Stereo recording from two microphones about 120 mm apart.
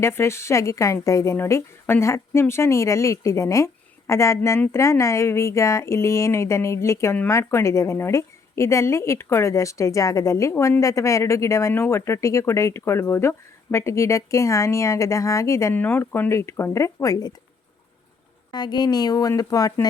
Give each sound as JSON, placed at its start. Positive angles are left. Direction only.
{"t": 0.0, "sound": "a woman's voice", "side_deg": 20}
{"t": 18.5, "sound": "speech", "side_deg": 35}